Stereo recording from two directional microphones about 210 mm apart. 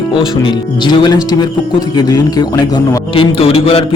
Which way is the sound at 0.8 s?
20° left (ahead or behind).